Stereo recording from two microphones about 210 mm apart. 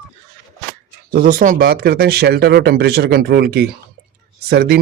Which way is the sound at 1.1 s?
40° right (ahead or behind).